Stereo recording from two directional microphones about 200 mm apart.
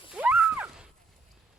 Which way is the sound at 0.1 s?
5° right (ahead or behind).